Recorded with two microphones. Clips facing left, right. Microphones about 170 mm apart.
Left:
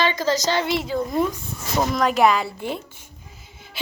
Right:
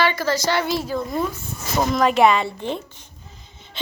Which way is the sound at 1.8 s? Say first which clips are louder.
Right 2 dB; centre (ahead or behind).